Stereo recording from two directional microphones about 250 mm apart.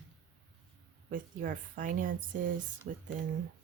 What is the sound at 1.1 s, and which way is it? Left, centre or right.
Speech, right.